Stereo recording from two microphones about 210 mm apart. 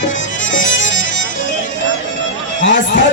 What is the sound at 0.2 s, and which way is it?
Music, 65° left (ahead or behind).